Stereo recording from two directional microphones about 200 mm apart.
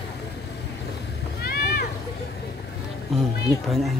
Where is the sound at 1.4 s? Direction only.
50° left (ahead or behind).